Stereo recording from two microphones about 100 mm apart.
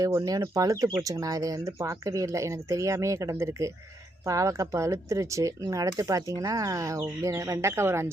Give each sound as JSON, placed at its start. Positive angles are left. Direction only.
{"t": 0.0, "sound": "speech", "side_deg": -35}